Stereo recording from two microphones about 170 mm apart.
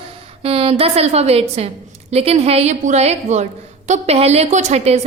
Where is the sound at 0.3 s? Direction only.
35° right (ahead or behind).